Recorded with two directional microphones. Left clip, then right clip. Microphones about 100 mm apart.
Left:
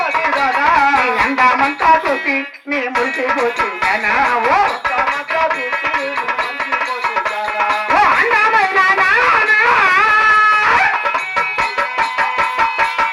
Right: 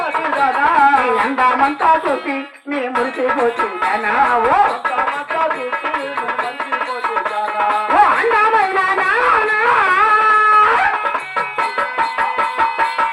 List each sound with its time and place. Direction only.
0.1 s music: 25° left (ahead or behind)
7.6 s music: 25° left (ahead or behind)